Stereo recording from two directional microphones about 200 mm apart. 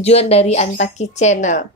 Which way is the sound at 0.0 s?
30° left (ahead or behind).